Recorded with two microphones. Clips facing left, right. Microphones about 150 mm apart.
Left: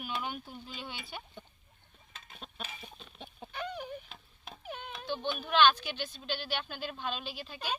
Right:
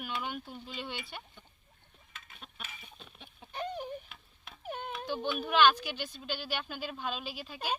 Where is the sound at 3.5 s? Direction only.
35° right (ahead or behind).